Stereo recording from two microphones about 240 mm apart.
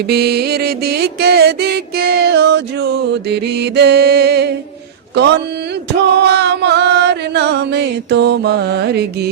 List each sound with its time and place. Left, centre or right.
0.1 s music: right
5.1 s mantra: right
6.1 s music: right